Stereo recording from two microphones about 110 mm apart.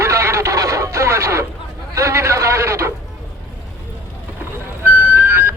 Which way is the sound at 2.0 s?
25° right (ahead or behind).